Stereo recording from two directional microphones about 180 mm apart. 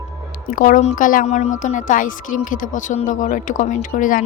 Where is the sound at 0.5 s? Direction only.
45° left (ahead or behind).